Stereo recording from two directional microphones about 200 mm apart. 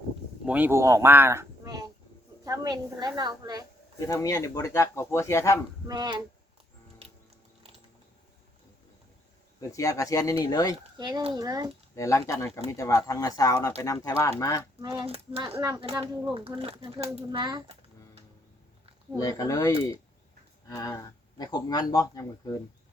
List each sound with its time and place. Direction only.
0.4 s a woman's voice: 10° right (ahead or behind)
4.0 s speech: 15° left (ahead or behind)
5.9 s speech: 20° right (ahead or behind)
9.6 s speech: 15° left (ahead or behind)
10.9 s speech: 20° right (ahead or behind)
11.9 s speech: 15° left (ahead or behind)
14.8 s speech: 25° right (ahead or behind)
15.5 s speech: 15° right (ahead or behind)
16.3 s speech: 30° right (ahead or behind)
19.2 s speech: 15° left (ahead or behind)